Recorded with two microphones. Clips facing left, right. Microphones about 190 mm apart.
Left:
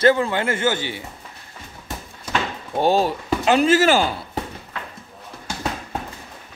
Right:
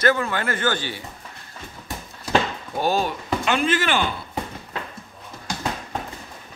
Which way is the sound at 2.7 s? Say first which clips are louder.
Left 4 dB; 30° left (ahead or behind).